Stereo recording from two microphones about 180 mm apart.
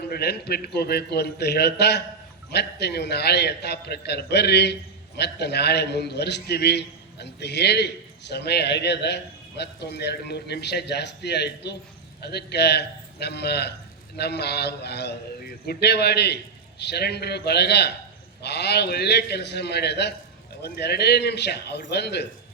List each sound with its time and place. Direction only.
0.1 s a man's voice: 65° left (ahead or behind)